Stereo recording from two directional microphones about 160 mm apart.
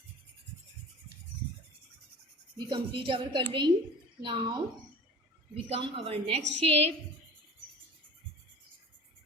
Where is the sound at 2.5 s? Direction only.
30° right (ahead or behind).